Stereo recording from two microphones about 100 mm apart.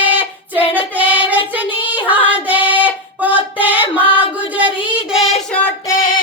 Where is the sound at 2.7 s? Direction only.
15° right (ahead or behind).